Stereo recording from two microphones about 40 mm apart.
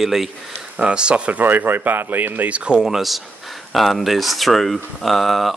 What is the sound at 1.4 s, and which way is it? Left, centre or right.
Speech, right.